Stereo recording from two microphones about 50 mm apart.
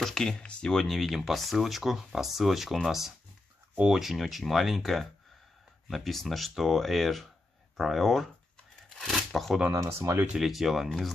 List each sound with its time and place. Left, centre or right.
0.0 s speech: centre
9.7 s speech: right
10.2 s speech: centre